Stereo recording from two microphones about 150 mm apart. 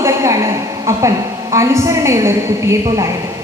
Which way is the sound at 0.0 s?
20° right (ahead or behind).